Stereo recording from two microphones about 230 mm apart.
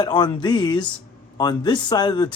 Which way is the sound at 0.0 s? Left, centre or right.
Centre.